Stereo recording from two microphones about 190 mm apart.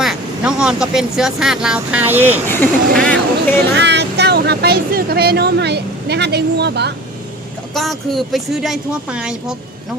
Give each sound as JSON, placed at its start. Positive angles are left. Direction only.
{"t": 0.0, "sound": "speech", "side_deg": -5}
{"t": 2.5, "sound": "speech", "side_deg": 10}
{"t": 3.8, "sound": "speech", "side_deg": -65}
{"t": 7.7, "sound": "speech", "side_deg": 0}